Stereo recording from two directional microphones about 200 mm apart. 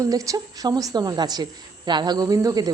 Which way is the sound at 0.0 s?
15° right (ahead or behind).